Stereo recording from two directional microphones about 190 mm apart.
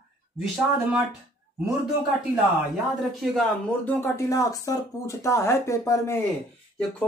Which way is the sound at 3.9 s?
15° left (ahead or behind).